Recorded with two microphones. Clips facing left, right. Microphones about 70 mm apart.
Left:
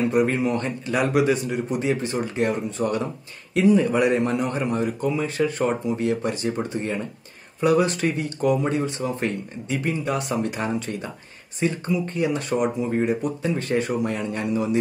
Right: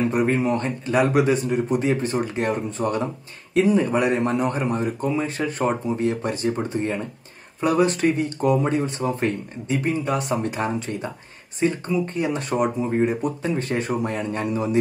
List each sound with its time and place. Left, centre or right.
0.1 s speech: right